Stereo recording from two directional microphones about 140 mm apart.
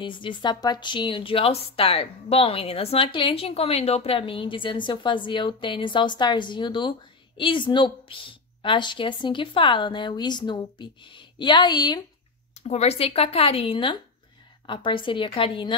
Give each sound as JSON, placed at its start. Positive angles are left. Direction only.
{"t": 0.0, "sound": "a woman's voice", "side_deg": 35}
{"t": 12.5, "sound": "a woman's voice", "side_deg": 50}